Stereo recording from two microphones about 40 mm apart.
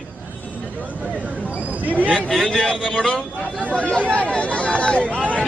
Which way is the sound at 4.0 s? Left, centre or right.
Left.